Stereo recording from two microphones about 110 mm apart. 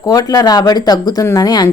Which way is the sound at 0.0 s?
35° left (ahead or behind).